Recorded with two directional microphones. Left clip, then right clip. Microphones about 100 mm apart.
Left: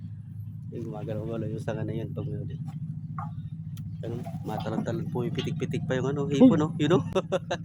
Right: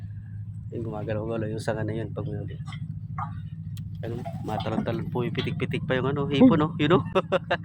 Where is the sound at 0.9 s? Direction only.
40° right (ahead or behind).